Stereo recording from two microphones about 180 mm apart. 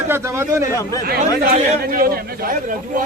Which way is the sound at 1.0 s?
55° right (ahead or behind).